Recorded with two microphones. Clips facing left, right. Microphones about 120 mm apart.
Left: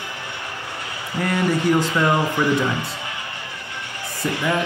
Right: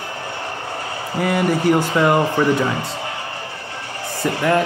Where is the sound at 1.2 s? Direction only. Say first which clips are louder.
Right 2 dB; 5° right (ahead or behind).